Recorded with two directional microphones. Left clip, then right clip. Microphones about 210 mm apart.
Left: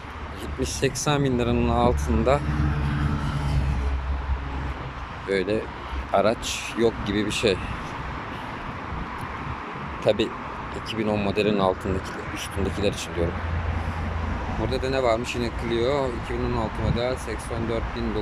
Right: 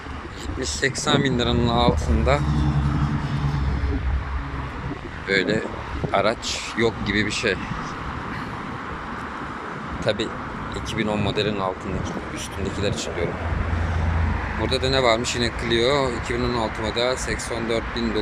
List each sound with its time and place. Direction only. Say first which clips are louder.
0.6 s speech: right 2 dB; 10° left (ahead or behind)
5.3 s speech: right 3 dB; 10° left (ahead or behind)
10.0 s speech: left 2 dB; 15° left (ahead or behind)
14.7 s speech: right 4 dB; 5° left (ahead or behind)